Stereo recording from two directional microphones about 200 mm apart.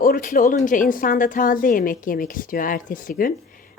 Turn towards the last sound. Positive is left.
turn(degrees=45)  # may be behind; listen again after turning